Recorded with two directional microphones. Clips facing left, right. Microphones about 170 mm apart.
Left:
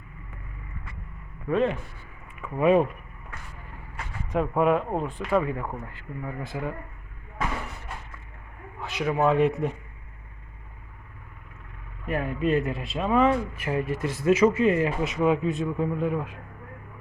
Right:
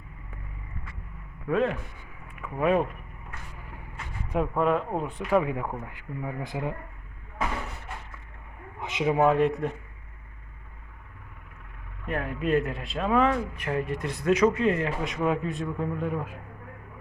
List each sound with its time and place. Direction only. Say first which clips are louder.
1.5 s speech: left 1 dB; centre (ahead or behind)
4.5 s speech: left 3 dB; 5° left (ahead or behind)
5.1 s speech: right 2 dB; 15° right (ahead or behind)
8.8 s a sound: right 2 dB; 20° right (ahead or behind)
9.2 s speech: left 2 dB; centre (ahead or behind)
12.0 s speech: left 3 dB; centre (ahead or behind)